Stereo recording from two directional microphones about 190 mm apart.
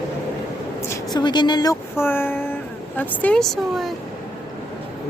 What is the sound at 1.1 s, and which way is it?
Speech, 20° left (ahead or behind).